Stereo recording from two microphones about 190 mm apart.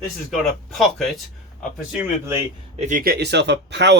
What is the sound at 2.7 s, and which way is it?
Speech, 40° right (ahead or behind).